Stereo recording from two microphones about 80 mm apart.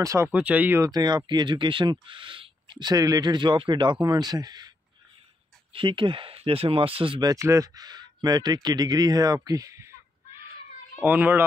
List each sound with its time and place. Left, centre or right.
0.0 s speech: right
0.3 s speech: centre
0.7 s speech: right
5.8 s speech: right
7.0 s speech: right
7.3 s speech: right
11.0 s speech: right